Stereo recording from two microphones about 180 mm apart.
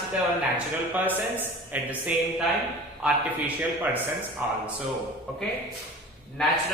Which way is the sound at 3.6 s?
10° right (ahead or behind).